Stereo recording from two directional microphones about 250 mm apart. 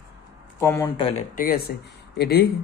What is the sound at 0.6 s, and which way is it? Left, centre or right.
Speech, centre.